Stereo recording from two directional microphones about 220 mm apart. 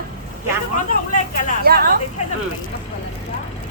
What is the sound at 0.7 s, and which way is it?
Speech, 35° left (ahead or behind).